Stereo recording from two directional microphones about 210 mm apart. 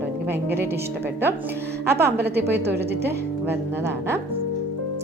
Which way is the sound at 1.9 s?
50° right (ahead or behind).